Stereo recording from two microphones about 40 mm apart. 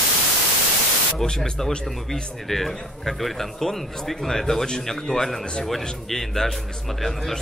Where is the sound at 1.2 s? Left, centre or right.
Left.